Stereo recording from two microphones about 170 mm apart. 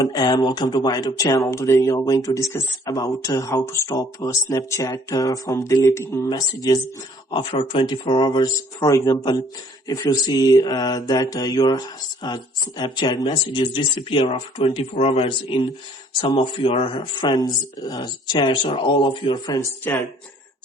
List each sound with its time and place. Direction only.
0.0 s speech: 25° left (ahead or behind)